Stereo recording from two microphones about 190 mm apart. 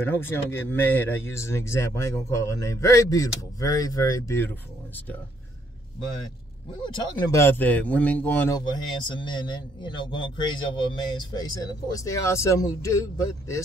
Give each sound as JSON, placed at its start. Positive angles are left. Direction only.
{"t": 0.0, "sound": "speech", "side_deg": 10}
{"t": 6.8, "sound": "speech", "side_deg": 20}
{"t": 8.5, "sound": "speech", "side_deg": 25}